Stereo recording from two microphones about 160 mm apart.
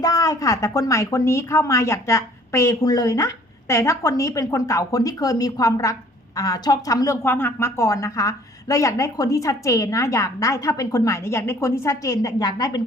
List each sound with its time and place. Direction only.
0.0 s a woman's voice: 20° left (ahead or behind)